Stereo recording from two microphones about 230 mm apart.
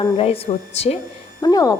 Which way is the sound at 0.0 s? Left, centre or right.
Left.